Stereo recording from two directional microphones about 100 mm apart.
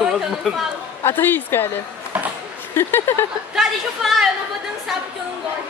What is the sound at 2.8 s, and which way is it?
Speech, 25° left (ahead or behind).